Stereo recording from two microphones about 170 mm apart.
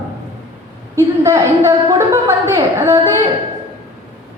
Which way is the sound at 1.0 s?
15° right (ahead or behind).